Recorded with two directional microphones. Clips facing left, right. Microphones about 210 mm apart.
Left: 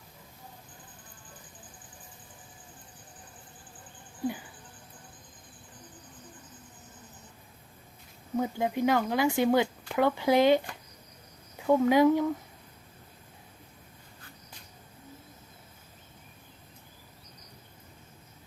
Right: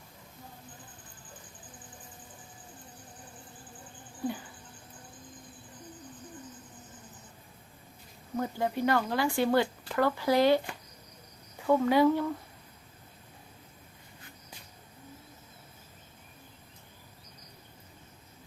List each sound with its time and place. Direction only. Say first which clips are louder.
8.4 s speech: left 2 dB; 15° left (ahead or behind)
11.6 s speech: left 2 dB; 10° left (ahead or behind)